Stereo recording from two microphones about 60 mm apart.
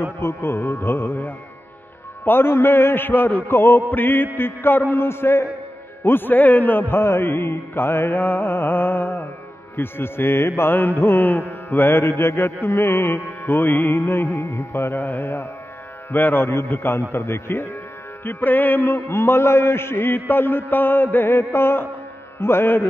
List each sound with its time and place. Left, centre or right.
0.2 s a man's voice: left
2.2 s a man's voice: left
8.2 s a man's voice: left
17.1 s a man's voice: left
18.2 s a man's voice: left
18.9 s a man's voice: left